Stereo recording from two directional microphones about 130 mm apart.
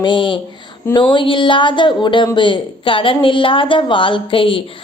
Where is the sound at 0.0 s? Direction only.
40° left (ahead or behind).